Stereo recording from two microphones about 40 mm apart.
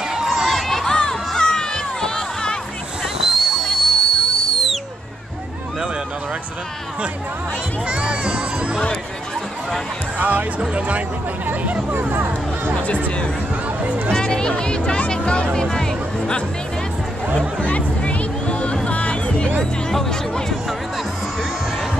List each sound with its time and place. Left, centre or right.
0.0 s a sound: centre
0.5 s crowd: centre
1.3 s music: centre
3.2 s a sound: centre
3.6 s a sound: centre
7.8 s music: right
10.1 s music: right
10.6 s a sound: right
11.9 s hubbub: right
14.1 s music: centre
15.5 s music: centre
17.6 s music: left
19.6 s music: centre